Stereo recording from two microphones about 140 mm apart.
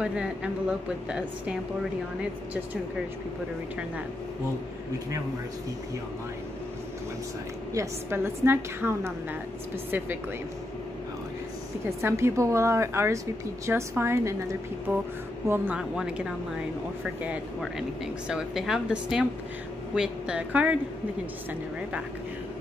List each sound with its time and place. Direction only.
0.0 s speech: 5° right (ahead or behind)
7.7 s a woman's voice: 20° right (ahead or behind)
12.0 s a woman's voice: 20° right (ahead or behind)
15.4 s a woman's voice: 15° right (ahead or behind)